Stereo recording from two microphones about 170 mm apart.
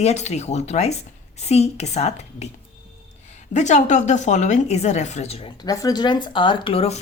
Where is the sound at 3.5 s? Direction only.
45° left (ahead or behind).